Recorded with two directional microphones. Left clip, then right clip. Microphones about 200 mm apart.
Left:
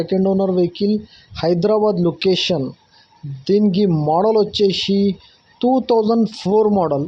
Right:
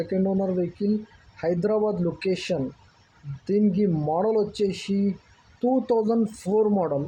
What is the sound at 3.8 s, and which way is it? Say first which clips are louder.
Speech: left 8 dB; 25° left (ahead or behind).